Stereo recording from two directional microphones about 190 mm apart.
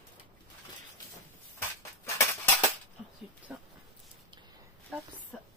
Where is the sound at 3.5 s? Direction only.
5° right (ahead or behind).